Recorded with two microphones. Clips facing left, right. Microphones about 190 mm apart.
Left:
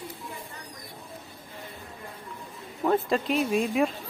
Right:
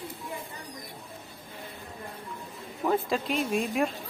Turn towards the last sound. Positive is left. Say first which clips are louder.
# left 3 dB
turn(degrees=0)  # may be behind; listen again after turning